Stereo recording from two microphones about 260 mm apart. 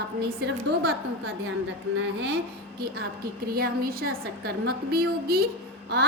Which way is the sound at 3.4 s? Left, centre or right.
Right.